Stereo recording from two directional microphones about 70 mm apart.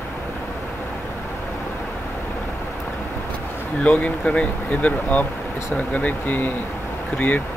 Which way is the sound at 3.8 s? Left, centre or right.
Centre.